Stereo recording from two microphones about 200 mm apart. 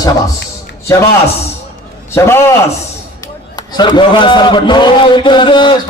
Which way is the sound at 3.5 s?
20° left (ahead or behind).